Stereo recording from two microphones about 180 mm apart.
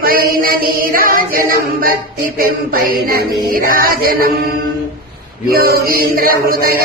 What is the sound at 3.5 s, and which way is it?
Music, 50° right (ahead or behind).